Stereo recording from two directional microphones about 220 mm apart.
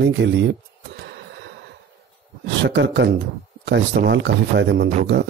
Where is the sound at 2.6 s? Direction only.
50° right (ahead or behind).